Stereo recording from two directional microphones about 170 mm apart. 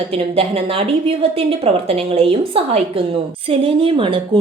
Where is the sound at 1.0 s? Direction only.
35° right (ahead or behind).